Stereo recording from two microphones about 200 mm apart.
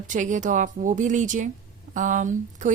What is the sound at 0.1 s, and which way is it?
A woman's voice, 40° right (ahead or behind).